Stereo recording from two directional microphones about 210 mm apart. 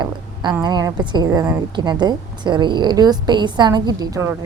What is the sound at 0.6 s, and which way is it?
A woman's voice, 20° right (ahead or behind).